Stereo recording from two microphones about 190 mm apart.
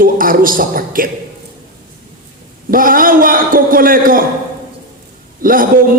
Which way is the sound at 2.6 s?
45° right (ahead or behind).